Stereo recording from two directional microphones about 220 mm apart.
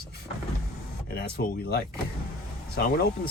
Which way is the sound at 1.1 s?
45° left (ahead or behind).